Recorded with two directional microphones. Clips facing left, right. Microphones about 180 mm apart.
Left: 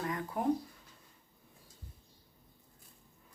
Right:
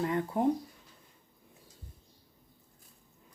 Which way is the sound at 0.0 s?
25° right (ahead or behind).